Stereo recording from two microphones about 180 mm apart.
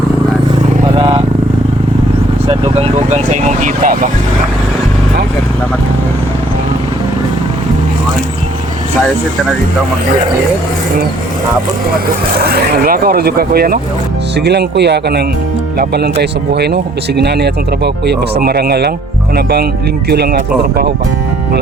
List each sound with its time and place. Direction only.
0.9 s vehicle: 30° right (ahead or behind)
2.5 s speech: 35° right (ahead or behind)
12.4 s speech: 55° right (ahead or behind)
14.3 s speech: 65° right (ahead or behind)